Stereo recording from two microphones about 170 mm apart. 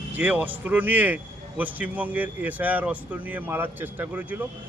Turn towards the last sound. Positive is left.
turn(degrees=-10)  # may be behind; listen again after turning